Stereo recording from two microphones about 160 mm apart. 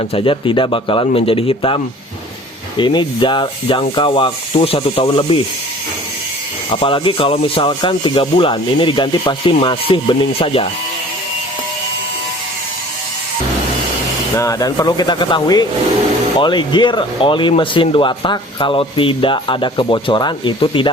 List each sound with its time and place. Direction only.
0.1 s speech: 35° left (ahead or behind)
6.8 s speech: 30° left (ahead or behind)
14.3 s speech: 20° left (ahead or behind)